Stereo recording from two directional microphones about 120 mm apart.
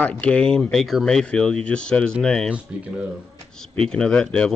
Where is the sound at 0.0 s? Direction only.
10° left (ahead or behind).